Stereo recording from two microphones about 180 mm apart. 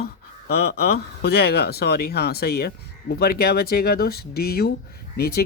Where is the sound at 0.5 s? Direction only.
60° left (ahead or behind).